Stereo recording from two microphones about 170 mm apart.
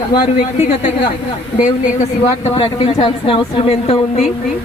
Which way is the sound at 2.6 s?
35° left (ahead or behind).